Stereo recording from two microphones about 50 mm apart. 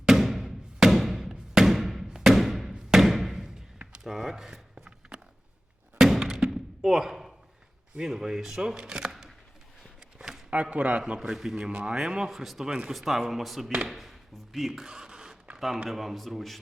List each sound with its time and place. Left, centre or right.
0.0 s music: centre
2.9 s thump: centre
4.0 s speech: centre
4.7 s a sound: centre
6.0 s thunk: centre
7.9 s speech: centre
10.2 s a sound: centre
10.5 s speech: right
11.0 s speech: centre
13.8 s a sound: centre
15.5 s speech: centre